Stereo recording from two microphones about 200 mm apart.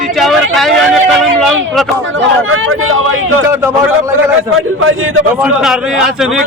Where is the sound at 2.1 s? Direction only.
90° right.